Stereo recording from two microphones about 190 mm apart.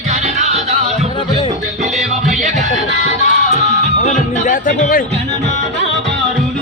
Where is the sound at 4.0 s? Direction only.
40° left (ahead or behind).